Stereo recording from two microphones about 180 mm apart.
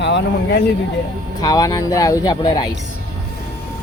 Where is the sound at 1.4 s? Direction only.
20° left (ahead or behind).